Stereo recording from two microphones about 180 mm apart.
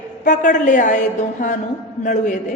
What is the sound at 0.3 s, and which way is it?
A woman's voice, 45° left (ahead or behind).